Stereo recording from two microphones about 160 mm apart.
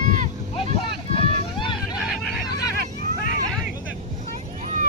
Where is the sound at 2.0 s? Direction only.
Centre (ahead or behind).